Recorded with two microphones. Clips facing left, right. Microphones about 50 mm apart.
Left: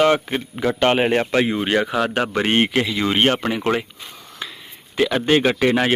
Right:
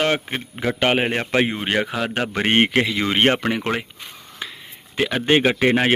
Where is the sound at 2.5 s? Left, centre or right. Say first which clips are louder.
Right 5 dB; right.